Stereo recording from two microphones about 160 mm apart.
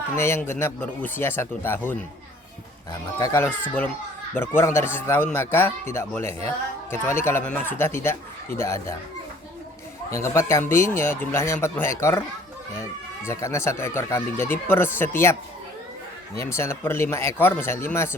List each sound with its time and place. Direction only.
0.2 s speech: 15° left (ahead or behind)
3.2 s speech: 15° left (ahead or behind)
10.1 s speech: 20° left (ahead or behind)